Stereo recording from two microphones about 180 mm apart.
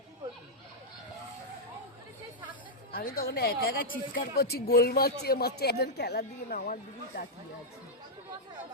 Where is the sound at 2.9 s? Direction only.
55° left (ahead or behind).